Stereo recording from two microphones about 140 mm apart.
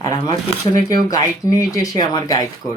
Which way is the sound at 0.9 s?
25° left (ahead or behind).